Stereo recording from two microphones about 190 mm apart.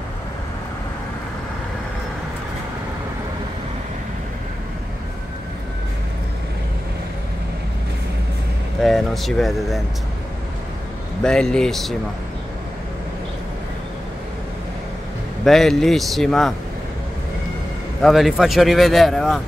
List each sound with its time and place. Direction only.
8.8 s speech: centre (ahead or behind)
11.2 s speech: 5° left (ahead or behind)
15.4 s speech: centre (ahead or behind)
18.0 s speech: centre (ahead or behind)